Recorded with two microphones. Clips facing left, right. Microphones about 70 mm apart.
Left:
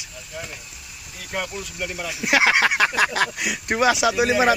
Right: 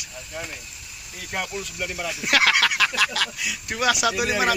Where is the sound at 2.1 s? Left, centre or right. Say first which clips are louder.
Left 2 dB; centre; by 3.3 s left.